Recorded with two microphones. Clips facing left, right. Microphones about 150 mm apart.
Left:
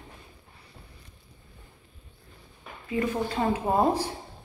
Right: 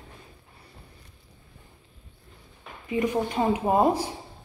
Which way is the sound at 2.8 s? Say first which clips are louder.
Right 2 dB; 15° right (ahead or behind).